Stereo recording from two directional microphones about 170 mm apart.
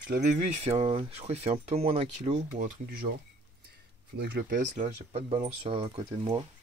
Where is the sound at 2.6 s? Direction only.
60° right (ahead or behind).